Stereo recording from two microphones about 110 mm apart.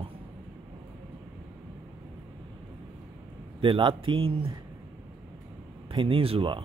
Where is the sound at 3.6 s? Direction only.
50° right (ahead or behind).